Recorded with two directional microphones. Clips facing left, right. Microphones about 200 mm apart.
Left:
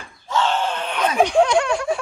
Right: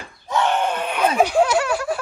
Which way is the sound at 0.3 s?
15° right (ahead or behind).